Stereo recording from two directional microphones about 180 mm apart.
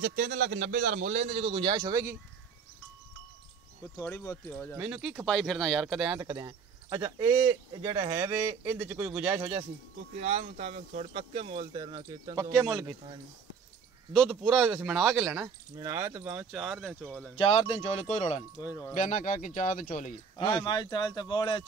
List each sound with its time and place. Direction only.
0.0 s a man's voice: 55° right (ahead or behind); by 2.1 s 20° right (ahead or behind)
3.9 s speech: 15° left (ahead or behind)
4.7 s speech: 5° right (ahead or behind)
5.2 s speech: 5° left (ahead or behind)
6.1 s speech: 25° right (ahead or behind)
10.2 s speech: 40° right (ahead or behind); by 12.5 s 20° right (ahead or behind)
14.4 s speech: centre (ahead or behind)
15.3 s speech: 15° right (ahead or behind)
17.4 s speech: 35° left (ahead or behind)
20.3 s speech: 25° left (ahead or behind)